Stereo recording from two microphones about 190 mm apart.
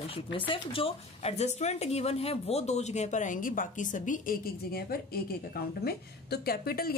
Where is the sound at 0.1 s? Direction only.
30° left (ahead or behind).